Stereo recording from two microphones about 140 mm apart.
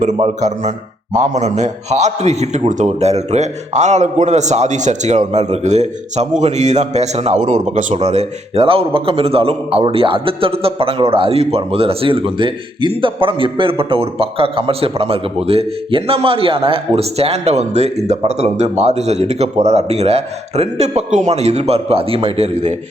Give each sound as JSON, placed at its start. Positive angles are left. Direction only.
{"t": 0.2, "sound": "a man's voice", "side_deg": -55}